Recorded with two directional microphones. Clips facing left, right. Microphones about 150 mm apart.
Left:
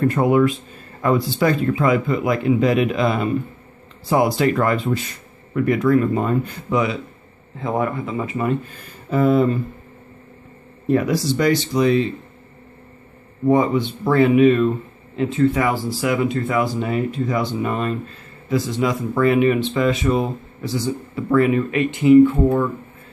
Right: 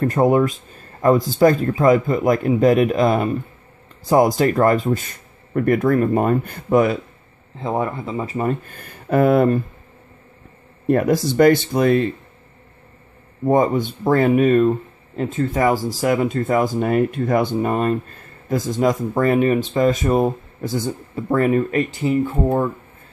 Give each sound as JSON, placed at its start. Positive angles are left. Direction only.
{"t": 0.0, "sound": "speech", "side_deg": -40}
{"t": 7.5, "sound": "speech", "side_deg": -30}
{"t": 8.6, "sound": "speech", "side_deg": -55}
{"t": 10.9, "sound": "speech", "side_deg": -50}
{"t": 13.5, "sound": "speech", "side_deg": -45}